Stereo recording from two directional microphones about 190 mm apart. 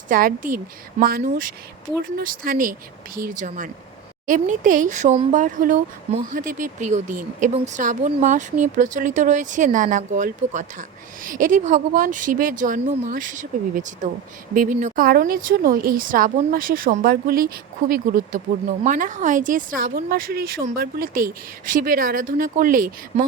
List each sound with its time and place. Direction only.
0.1 s speech: 45° right (ahead or behind)